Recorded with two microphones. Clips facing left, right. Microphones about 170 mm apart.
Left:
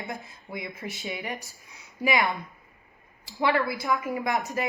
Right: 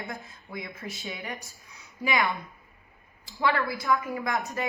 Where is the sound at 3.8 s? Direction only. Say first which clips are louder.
Even; 20° left (ahead or behind).